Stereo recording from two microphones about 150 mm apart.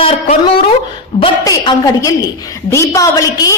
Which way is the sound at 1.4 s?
25° left (ahead or behind).